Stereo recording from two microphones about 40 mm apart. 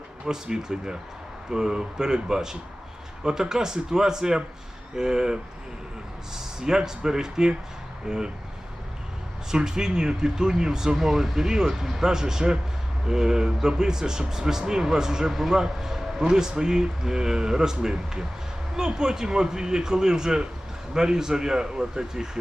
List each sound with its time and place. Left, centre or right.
0.3 s speech: centre
9.5 s a man's voice: centre
16.2 s speech: centre